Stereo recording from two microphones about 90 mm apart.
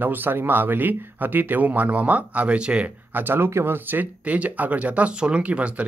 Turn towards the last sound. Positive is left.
turn(degrees=-15)  # may be behind; listen again after turning